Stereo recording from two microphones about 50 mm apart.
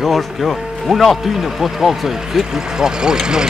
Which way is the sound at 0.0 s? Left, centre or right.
Centre.